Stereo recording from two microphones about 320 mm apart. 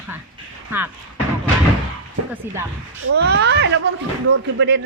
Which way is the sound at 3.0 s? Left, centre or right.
Right.